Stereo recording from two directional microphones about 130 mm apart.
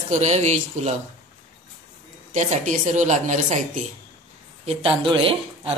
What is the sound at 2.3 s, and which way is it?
A woman's voice, 65° right (ahead or behind).